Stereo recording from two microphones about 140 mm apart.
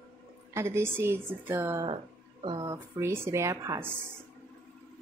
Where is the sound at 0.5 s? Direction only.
20° right (ahead or behind).